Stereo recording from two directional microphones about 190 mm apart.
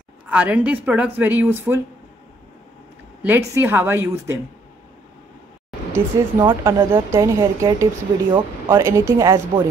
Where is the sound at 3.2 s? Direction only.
10° right (ahead or behind).